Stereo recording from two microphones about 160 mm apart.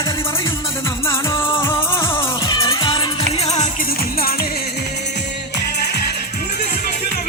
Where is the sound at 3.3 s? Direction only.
40° left (ahead or behind).